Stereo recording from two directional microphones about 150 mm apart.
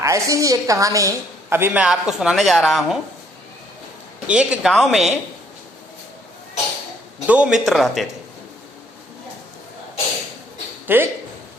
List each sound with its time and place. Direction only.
0.0 s a woman's voice: 20° right (ahead or behind); by 3.0 s centre (ahead or behind)
4.3 s speech: 5° right (ahead or behind)
7.3 s speech: 5° right (ahead or behind)
10.8 s speech: 15° right (ahead or behind)